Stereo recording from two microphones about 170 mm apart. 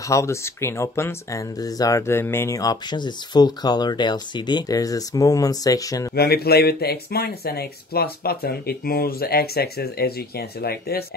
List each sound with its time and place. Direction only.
0.0 s speech: 15° left (ahead or behind)
6.1 s speech: 65° left (ahead or behind)